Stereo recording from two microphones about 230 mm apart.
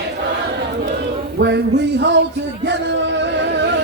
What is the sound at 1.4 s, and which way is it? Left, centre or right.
Music, right.